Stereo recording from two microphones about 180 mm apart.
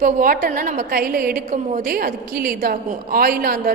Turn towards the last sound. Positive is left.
turn(degrees=-55)  # may be behind; listen again after turning